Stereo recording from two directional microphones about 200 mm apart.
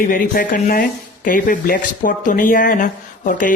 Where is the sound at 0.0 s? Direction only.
45° left (ahead or behind).